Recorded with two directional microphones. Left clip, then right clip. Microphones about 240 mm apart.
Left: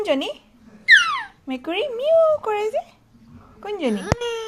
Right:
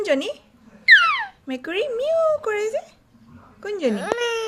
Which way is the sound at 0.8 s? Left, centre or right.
Right.